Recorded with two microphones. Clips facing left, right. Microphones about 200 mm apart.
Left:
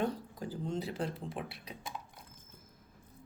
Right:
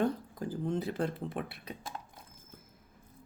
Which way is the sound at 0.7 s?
55° right (ahead or behind).